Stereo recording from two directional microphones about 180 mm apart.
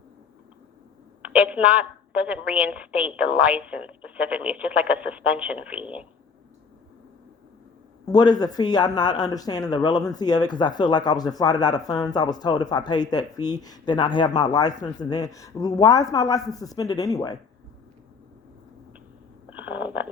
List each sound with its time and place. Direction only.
1.4 s a woman's voice: 5° right (ahead or behind)
8.0 s speech: 20° left (ahead or behind)
19.5 s a sound: 10° right (ahead or behind)